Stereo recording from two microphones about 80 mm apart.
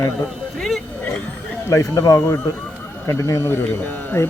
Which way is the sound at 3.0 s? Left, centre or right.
Left.